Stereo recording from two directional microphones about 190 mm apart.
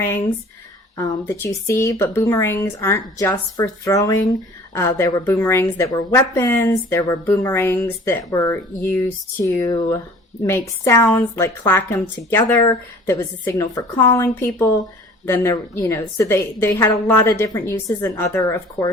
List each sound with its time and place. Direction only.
0.9 s a woman's voice: 15° left (ahead or behind)